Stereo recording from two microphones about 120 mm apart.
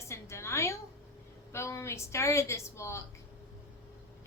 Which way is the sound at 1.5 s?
20° left (ahead or behind).